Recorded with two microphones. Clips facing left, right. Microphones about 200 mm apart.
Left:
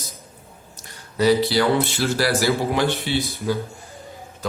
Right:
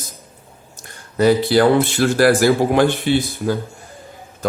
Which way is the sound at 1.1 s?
50° right (ahead or behind).